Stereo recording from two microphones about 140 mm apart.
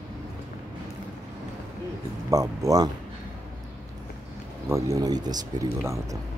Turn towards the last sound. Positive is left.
turn(degrees=-30)  # may be behind; listen again after turning